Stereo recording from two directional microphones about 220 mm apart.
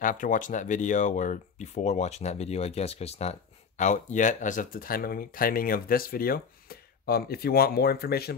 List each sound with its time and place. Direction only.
0.0 s speech: 35° left (ahead or behind)